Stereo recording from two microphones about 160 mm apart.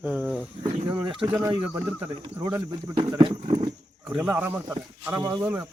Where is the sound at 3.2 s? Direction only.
30° right (ahead or behind).